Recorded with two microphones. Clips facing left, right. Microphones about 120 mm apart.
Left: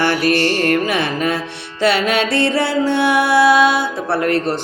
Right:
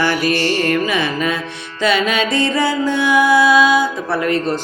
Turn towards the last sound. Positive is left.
turn(degrees=65)  # may be behind; listen again after turning